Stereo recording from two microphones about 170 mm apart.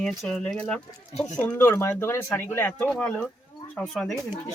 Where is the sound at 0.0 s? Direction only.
Centre (ahead or behind).